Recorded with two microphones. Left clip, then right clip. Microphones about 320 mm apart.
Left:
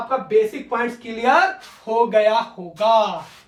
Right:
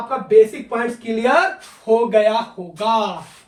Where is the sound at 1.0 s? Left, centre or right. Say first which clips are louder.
Even; centre.